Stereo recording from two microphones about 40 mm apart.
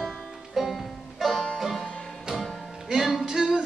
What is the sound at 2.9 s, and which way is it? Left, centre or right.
Music, centre.